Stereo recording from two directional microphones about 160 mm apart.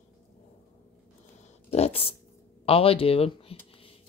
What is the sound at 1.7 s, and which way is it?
Speech, 40° left (ahead or behind).